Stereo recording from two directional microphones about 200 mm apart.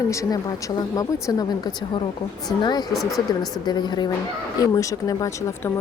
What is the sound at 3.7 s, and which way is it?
A woman's voice, 20° left (ahead or behind).